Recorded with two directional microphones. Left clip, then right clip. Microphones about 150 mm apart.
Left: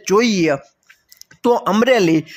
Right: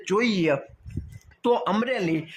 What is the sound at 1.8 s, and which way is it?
Speech, 50° left (ahead or behind).